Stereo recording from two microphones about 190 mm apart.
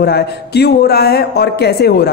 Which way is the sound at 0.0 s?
60° left (ahead or behind).